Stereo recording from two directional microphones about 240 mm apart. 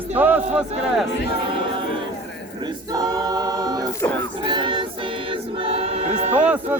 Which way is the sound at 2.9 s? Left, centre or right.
Centre.